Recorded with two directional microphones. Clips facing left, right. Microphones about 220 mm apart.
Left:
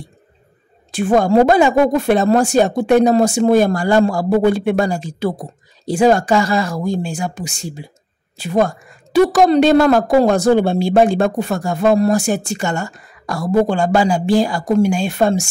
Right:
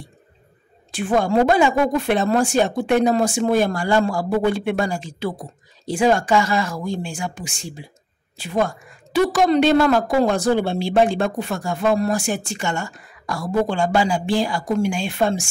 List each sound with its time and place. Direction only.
0.9 s a woman's voice: 45° left (ahead or behind)